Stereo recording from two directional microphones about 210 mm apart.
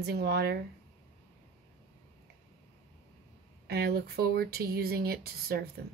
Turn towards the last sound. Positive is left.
turn(degrees=-50)  # may be behind; listen again after turning